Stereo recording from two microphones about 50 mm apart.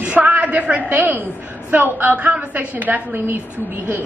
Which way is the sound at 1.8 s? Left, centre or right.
Right.